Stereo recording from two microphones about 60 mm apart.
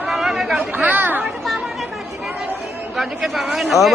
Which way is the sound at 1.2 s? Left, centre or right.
Centre.